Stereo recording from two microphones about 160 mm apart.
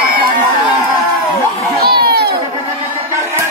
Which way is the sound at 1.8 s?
80° right.